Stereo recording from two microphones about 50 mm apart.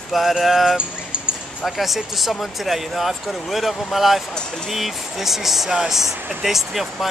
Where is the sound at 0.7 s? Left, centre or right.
Centre.